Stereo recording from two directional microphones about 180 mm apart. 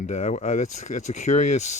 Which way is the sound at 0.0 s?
40° left (ahead or behind).